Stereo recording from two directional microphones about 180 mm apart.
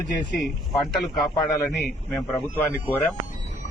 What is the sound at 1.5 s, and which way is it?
A man's voice, 20° left (ahead or behind).